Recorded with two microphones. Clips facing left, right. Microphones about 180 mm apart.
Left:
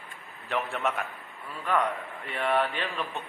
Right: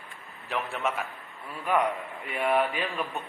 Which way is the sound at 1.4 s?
10° right (ahead or behind).